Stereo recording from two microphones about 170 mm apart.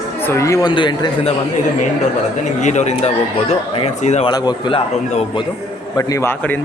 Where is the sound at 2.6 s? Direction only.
45° left (ahead or behind).